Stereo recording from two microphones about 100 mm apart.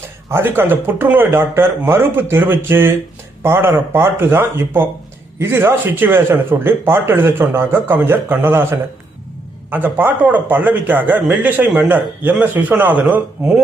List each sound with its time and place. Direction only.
0.3 s speech: 25° right (ahead or behind)
9.6 s a man's voice: 20° right (ahead or behind)